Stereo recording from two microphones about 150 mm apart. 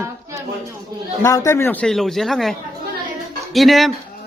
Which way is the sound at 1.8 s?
Centre (ahead or behind).